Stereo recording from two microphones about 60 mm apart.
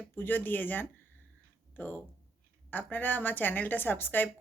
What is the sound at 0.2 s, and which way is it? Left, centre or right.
A woman's voice, left.